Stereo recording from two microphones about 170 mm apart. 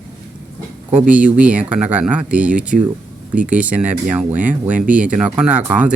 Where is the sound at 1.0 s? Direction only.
10° right (ahead or behind).